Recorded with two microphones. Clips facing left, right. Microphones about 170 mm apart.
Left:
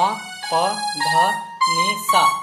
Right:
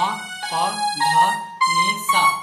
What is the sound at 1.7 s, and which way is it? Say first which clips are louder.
Speech: left 4 dB; 60° left (ahead or behind).